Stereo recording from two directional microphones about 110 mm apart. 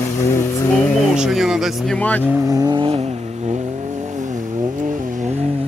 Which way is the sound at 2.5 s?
35° right (ahead or behind).